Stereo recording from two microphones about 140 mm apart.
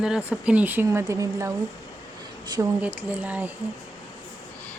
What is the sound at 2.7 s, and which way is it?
Speech, 10° right (ahead or behind).